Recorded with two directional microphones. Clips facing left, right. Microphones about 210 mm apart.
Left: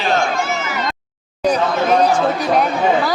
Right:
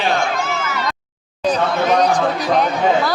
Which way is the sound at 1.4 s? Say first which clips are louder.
Left 1 dB; 10° left (ahead or behind).